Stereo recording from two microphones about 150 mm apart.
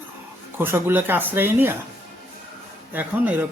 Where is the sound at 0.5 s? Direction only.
15° right (ahead or behind).